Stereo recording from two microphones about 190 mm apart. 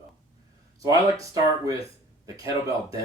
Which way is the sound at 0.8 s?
20° right (ahead or behind).